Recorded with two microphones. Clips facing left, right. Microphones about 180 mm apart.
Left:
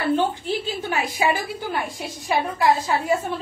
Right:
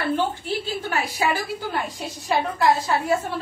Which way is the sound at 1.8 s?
15° left (ahead or behind).